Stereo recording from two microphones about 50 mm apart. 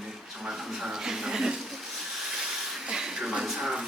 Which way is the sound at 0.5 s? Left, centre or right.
Centre.